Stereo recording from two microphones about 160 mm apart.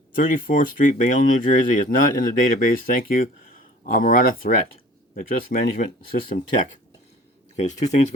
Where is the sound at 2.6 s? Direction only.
60° left (ahead or behind).